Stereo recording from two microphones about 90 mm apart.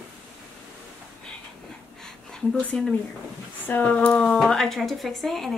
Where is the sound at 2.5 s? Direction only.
15° left (ahead or behind).